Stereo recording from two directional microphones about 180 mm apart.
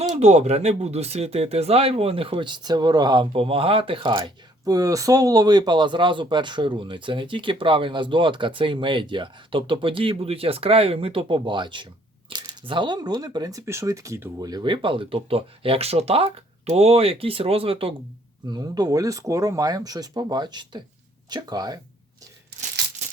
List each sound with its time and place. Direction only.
0.2 s speech: 40° right (ahead or behind); by 21.8 s 20° right (ahead or behind)